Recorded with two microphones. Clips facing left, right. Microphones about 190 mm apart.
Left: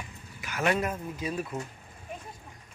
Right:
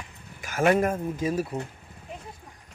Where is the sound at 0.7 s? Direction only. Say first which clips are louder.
Right 6 dB; 50° right (ahead or behind).